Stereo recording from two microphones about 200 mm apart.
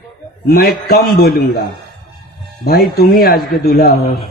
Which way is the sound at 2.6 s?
50° left (ahead or behind).